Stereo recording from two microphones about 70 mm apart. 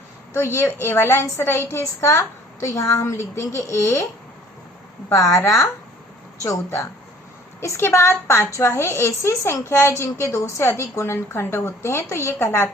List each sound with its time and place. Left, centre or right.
0.3 s a woman's voice: left
5.1 s a woman's voice: left
6.4 s a woman's voice: left